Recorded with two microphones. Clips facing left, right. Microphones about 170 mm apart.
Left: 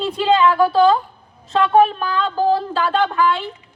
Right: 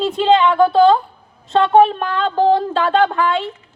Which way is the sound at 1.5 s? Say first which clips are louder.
Right 2 dB; 25° right (ahead or behind).